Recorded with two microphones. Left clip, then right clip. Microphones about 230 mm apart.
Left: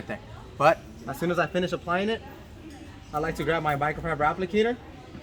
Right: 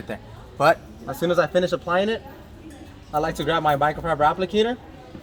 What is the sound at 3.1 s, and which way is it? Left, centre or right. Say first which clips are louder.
Speech: right 4 dB; centre.